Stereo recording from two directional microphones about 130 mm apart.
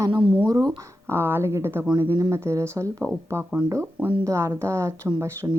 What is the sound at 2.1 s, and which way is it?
A woman's voice, 30° right (ahead or behind).